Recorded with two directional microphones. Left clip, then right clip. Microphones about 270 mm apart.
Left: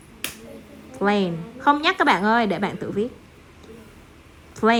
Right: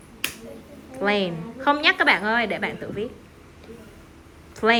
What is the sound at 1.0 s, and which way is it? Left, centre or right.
Speech, centre.